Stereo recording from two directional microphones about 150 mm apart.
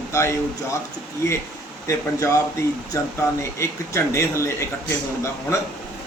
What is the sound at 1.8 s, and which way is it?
Speech, 20° left (ahead or behind).